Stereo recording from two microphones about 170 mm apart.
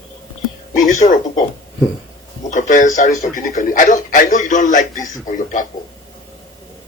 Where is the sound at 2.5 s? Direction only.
50° left (ahead or behind).